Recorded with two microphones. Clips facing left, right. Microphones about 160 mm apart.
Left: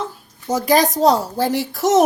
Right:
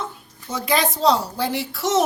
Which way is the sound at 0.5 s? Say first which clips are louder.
Left 6 dB; 40° left (ahead or behind).